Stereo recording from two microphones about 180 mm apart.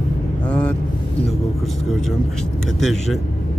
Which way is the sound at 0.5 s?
5° left (ahead or behind).